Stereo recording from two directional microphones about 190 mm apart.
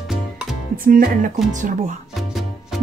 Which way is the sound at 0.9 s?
45° right (ahead or behind).